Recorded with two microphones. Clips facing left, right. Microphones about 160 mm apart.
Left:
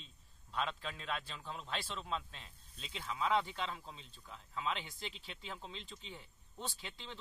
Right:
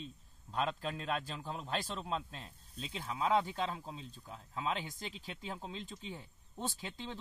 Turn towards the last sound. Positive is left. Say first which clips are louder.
# right 6 dB
turn(degrees=-45)  # may be behind; listen again after turning